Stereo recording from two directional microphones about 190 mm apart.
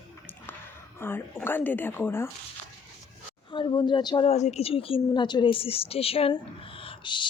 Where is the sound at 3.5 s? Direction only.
25° left (ahead or behind).